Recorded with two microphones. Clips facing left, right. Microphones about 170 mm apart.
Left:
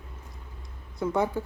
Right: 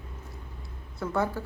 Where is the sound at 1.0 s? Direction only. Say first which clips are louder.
Left 2 dB; 20° left (ahead or behind).